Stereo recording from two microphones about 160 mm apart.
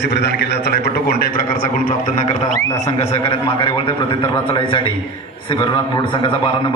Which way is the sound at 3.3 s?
35° left (ahead or behind).